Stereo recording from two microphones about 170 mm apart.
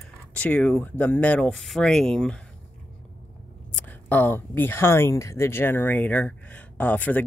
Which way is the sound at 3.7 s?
10° left (ahead or behind).